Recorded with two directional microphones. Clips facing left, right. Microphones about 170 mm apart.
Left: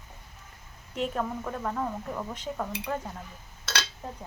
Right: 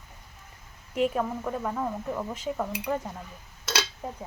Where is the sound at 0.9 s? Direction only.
5° right (ahead or behind).